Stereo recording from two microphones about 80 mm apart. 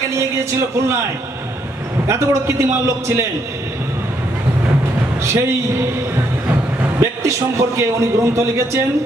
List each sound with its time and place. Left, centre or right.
2.0 s a man's voice: right
5.2 s a man's voice: right
7.0 s a man's voice: right